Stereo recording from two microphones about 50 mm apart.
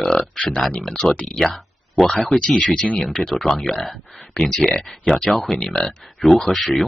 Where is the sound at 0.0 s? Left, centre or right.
Centre.